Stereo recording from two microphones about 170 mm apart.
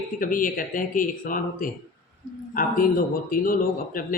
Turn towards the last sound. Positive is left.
turn(degrees=55)  # may be behind; listen again after turning